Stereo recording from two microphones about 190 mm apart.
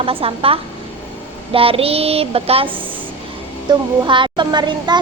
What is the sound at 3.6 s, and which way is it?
Speech, 25° right (ahead or behind).